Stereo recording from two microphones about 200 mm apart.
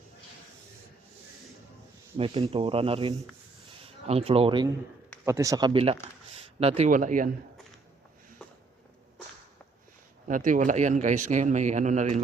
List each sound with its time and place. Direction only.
2.1 s speech: 30° right (ahead or behind)
5.2 s speech: 15° right (ahead or behind); by 7.3 s 40° right (ahead or behind)
10.2 s speech: 40° right (ahead or behind)